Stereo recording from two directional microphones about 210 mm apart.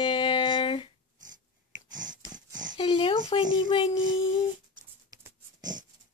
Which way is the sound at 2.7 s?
25° left (ahead or behind).